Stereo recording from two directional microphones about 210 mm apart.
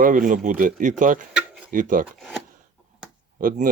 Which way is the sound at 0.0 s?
40° right (ahead or behind).